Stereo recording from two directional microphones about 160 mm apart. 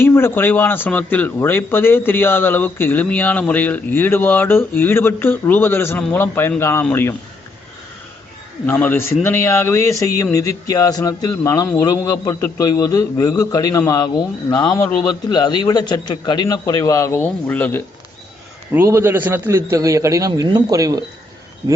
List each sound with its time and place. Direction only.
0.0 s speech: 15° left (ahead or behind)
8.6 s a man's voice: 10° left (ahead or behind)
18.7 s a man's voice: 15° right (ahead or behind)